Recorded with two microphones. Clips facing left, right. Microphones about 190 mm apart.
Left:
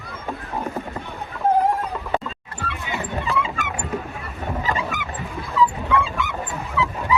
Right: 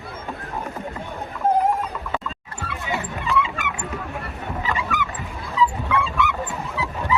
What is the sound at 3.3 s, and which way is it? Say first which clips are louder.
Music: right 4 dB; 35° left (ahead or behind).